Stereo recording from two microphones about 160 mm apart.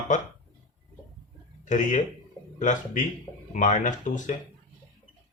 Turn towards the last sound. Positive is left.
turn(degrees=50)  # may be behind; listen again after turning